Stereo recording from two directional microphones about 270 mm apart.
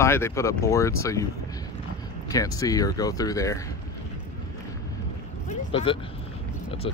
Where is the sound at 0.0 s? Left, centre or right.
Centre.